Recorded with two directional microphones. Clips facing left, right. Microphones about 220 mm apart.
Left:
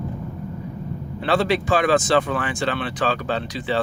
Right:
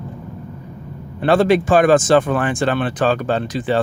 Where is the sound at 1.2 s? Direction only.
50° right (ahead or behind).